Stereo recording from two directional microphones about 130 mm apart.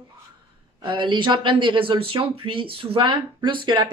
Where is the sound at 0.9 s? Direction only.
40° right (ahead or behind).